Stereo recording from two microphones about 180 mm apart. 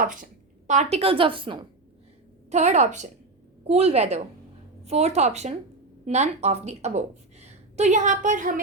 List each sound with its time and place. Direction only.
0.0 s a woman's voice: 50° right (ahead or behind)
0.7 s a woman's voice: 35° right (ahead or behind)
2.5 s a woman's voice: 40° right (ahead or behind)